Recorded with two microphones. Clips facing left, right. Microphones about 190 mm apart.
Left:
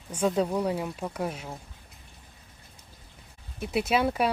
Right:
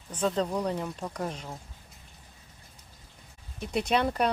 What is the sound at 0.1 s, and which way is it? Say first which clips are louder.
Speech: left 2 dB; 10° left (ahead or behind).